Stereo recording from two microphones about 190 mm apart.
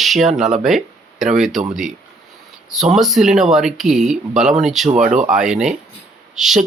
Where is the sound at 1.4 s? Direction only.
Centre (ahead or behind).